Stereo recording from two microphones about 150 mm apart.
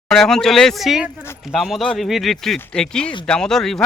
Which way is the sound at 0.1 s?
5° left (ahead or behind).